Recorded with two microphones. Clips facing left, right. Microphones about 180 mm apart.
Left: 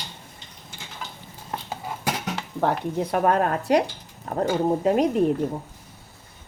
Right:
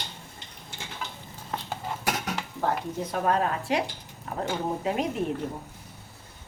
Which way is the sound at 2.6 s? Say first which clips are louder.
Left 6 dB; 65° left (ahead or behind).